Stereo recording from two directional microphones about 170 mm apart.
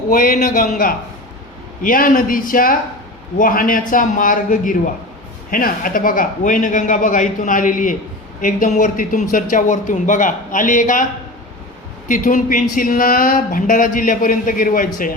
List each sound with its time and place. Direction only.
0.1 s a man's voice: 55° left (ahead or behind)
12.0 s speech: 50° left (ahead or behind)